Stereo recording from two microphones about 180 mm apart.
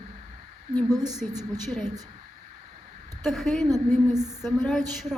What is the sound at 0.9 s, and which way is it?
Speech, 20° right (ahead or behind).